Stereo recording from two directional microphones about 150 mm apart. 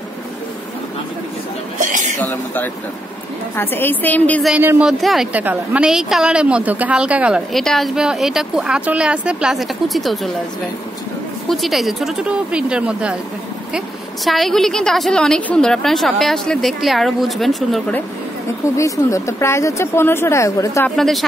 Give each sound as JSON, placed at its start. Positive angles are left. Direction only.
{"t": 1.8, "sound": "a sound", "side_deg": -55}
{"t": 2.1, "sound": "a woman's voice", "side_deg": 10}
{"t": 4.6, "sound": "a woman's voice", "side_deg": -10}
{"t": 11.4, "sound": "a woman's voice", "side_deg": 0}
{"t": 18.8, "sound": "speech", "side_deg": 20}
{"t": 20.9, "sound": "a woman's voice", "side_deg": 0}